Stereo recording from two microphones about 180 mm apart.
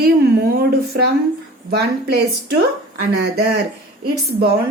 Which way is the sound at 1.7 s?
65° right (ahead or behind).